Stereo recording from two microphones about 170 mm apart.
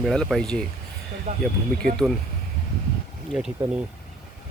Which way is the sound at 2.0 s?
10° right (ahead or behind).